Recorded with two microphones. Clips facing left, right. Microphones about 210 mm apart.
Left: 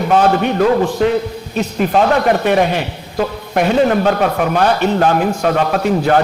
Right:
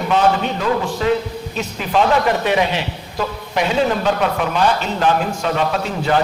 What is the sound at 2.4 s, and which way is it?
A man's voice, 50° left (ahead or behind).